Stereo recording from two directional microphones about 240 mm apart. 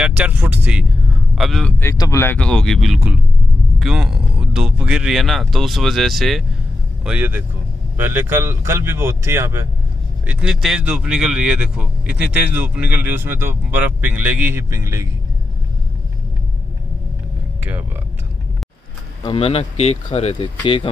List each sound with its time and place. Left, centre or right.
0.0 s speech: centre
19.2 s speech: left